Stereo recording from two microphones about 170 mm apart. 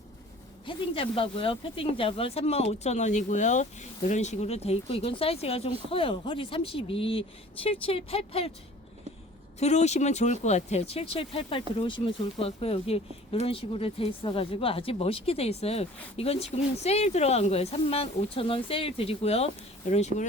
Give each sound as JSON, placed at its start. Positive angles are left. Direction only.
{"t": 0.6, "sound": "speech", "side_deg": 30}
{"t": 9.6, "sound": "speech", "side_deg": 40}